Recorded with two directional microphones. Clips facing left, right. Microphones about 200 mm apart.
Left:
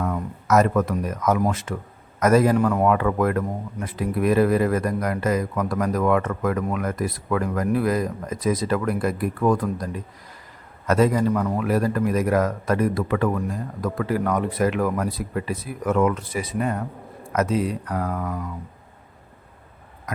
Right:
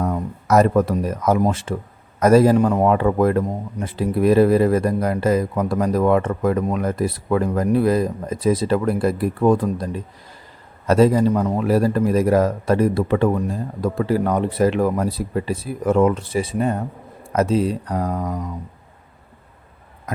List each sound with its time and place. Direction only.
0.4 s speech: 35° right (ahead or behind)
18.2 s speech: 20° right (ahead or behind)